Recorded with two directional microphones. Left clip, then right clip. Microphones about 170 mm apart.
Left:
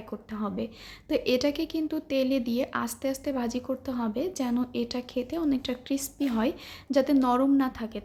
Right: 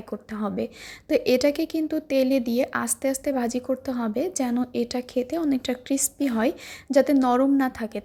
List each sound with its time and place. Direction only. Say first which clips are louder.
0.1 s a woman's voice: right 5 dB; 30° right (ahead or behind)